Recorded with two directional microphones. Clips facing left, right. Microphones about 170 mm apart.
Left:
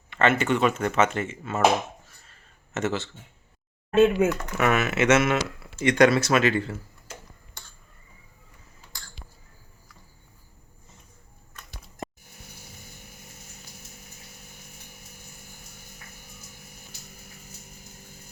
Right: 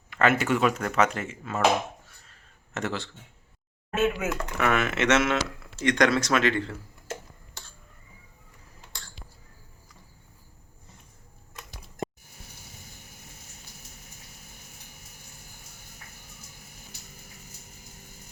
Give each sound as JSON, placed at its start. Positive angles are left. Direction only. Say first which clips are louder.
{"t": 0.1, "sound": "speech", "louder": "left 1 dB", "side_deg": 0}
{"t": 2.0, "sound": "a sound", "louder": "left 1 dB", "side_deg": 0}
{"t": 3.9, "sound": "speech", "louder": "left 7 dB", "side_deg": 30}
{"t": 4.5, "sound": "speech", "louder": "right 2 dB", "side_deg": 5}